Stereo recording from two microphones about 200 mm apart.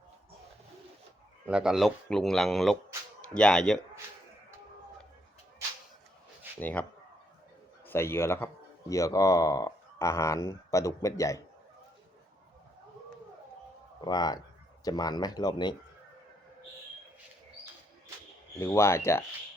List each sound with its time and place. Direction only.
1.5 s speech: 5° right (ahead or behind)
6.6 s speech: 10° left (ahead or behind)
7.9 s speech: 10° left (ahead or behind)
14.0 s speech: 20° left (ahead or behind)
18.6 s speech: 15° left (ahead or behind)